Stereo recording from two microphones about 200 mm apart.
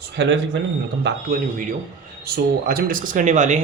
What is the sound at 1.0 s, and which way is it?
Speech, 45° right (ahead or behind).